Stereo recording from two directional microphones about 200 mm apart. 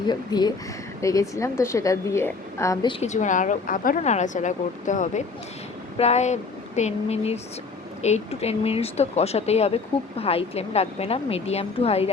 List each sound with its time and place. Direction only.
0.0 s a woman's voice: 20° left (ahead or behind)
2.9 s speech: 35° left (ahead or behind)